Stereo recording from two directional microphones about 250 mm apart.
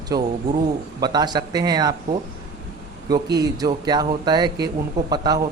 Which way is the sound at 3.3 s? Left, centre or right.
Centre.